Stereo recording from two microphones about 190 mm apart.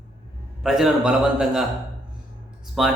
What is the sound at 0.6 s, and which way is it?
Speech, centre (ahead or behind).